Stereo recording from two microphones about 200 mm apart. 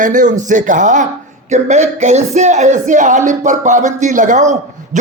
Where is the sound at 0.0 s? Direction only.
40° right (ahead or behind).